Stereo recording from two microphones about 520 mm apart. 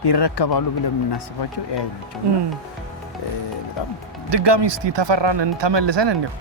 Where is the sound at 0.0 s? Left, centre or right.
Left.